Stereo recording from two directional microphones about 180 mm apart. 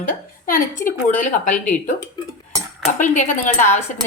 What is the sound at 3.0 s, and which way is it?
Speech, 45° left (ahead or behind).